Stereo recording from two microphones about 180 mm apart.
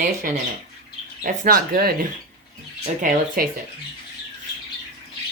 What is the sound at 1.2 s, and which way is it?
Speech, 50° right (ahead or behind).